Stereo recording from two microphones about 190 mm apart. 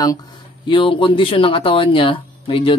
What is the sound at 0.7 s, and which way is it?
Speech, 25° left (ahead or behind).